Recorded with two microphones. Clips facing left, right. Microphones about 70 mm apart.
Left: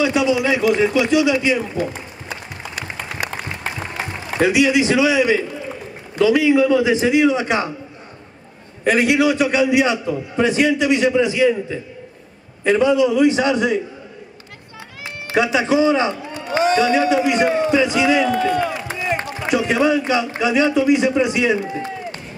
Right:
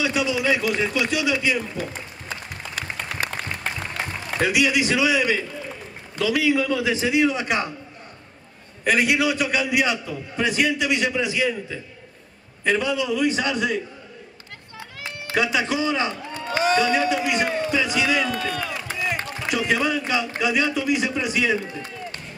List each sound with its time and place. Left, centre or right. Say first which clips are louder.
0.0 s a sound: left 6 dB; centre
4.5 s a man's voice: left 5 dB; centre
8.9 s a man's voice: left 5 dB; centre
12.6 s speech: left 7 dB; centre
15.3 s a man's voice: left 6 dB; centre
16.6 s a man's voice: left 4 dB; centre; by 18.8 s left
18.9 s run: left 4 dB; left
19.5 s speech: left 6 dB; centre
21.5 s a man's voice: left 6 dB; left